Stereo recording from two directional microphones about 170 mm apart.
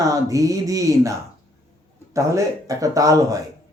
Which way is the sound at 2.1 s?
20° right (ahead or behind).